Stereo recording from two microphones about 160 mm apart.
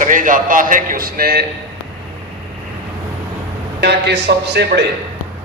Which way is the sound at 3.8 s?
90° right.